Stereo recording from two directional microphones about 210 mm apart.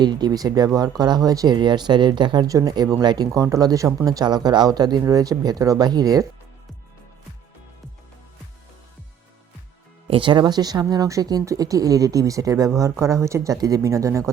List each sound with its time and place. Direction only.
0.0 s speech: 20° right (ahead or behind)
10.1 s speech: 25° right (ahead or behind)